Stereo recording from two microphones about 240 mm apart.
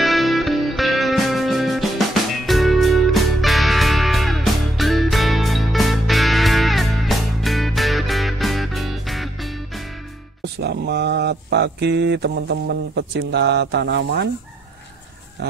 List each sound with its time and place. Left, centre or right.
0.0 s music: centre
10.6 s speech: right